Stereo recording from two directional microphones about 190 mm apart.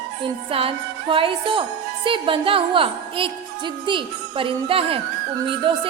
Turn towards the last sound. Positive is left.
turn(degrees=-25)  # may be behind; listen again after turning